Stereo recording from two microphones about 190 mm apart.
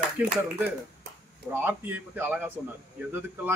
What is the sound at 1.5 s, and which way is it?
Speech, 10° right (ahead or behind).